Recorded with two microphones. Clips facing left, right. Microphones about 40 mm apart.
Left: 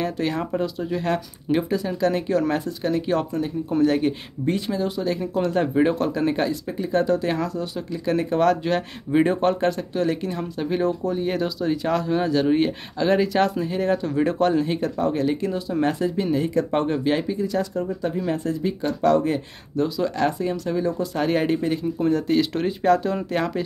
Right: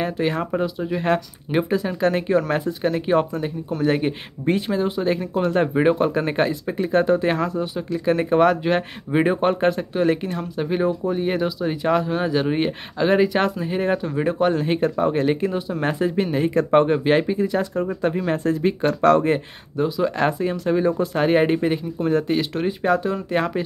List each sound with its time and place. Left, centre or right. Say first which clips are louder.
0.0 s speech: right 2 dB; centre
14.0 s speech: even; centre
14.6 s speech: right 3 dB; right
19.7 s speech: right 1 dB; centre
20.2 s speech: right 2 dB; right
22.0 s speech: even; centre